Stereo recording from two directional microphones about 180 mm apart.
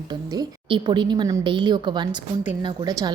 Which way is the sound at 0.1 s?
25° right (ahead or behind).